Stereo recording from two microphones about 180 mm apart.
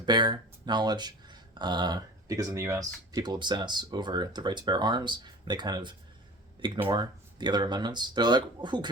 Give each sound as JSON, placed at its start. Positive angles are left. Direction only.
{"t": 0.0, "sound": "speech", "side_deg": -25}